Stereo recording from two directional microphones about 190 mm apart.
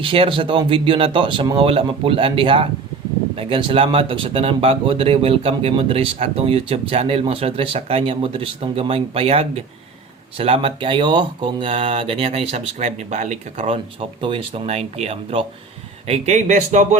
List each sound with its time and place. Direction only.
0.0 s speech: 30° right (ahead or behind)